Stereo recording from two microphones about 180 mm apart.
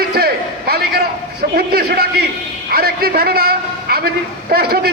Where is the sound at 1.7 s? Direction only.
60° right (ahead or behind).